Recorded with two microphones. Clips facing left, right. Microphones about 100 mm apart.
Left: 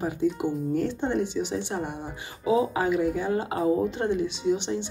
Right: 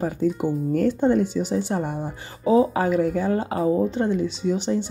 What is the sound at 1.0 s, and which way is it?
Speech, 45° right (ahead or behind).